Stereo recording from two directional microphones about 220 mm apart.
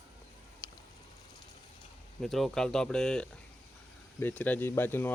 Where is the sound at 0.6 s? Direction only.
20° left (ahead or behind).